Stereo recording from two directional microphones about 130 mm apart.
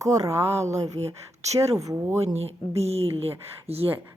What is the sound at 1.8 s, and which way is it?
Speech, 20° right (ahead or behind).